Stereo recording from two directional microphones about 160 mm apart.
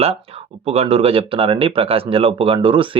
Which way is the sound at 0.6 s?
40° right (ahead or behind).